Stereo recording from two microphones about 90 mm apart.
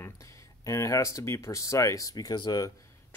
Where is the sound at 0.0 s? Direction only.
35° left (ahead or behind); by 2.6 s 50° left (ahead or behind).